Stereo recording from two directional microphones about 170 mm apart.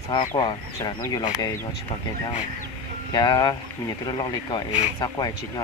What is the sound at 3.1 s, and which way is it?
Speech, 25° left (ahead or behind).